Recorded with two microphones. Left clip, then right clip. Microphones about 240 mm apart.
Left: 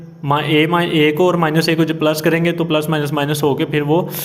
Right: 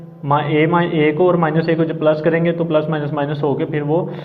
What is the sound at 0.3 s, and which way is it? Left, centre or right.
A man's voice, left.